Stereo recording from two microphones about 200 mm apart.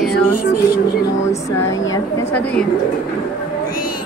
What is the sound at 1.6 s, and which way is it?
Speech, 15° left (ahead or behind).